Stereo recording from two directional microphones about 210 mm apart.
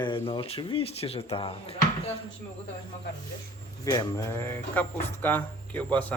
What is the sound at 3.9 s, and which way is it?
Speech, 15° left (ahead or behind).